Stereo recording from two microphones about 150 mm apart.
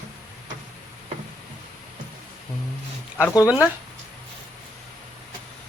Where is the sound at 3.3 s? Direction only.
25° left (ahead or behind).